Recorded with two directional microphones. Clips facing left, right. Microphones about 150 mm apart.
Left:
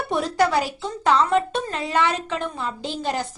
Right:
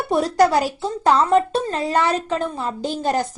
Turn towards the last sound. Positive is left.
turn(degrees=-45)  # may be behind; listen again after turning